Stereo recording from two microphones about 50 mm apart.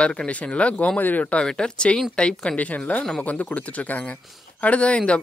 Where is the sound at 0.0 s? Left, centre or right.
Left.